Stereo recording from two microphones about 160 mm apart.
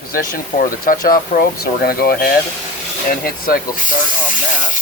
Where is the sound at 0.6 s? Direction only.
60° left (ahead or behind).